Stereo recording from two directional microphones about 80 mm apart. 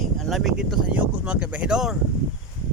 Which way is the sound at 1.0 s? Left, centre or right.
Centre.